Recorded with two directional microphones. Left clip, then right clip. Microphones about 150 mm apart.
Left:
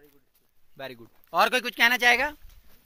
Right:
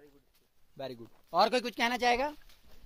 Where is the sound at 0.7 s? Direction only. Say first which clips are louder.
Left 2 dB; 10° right (ahead or behind).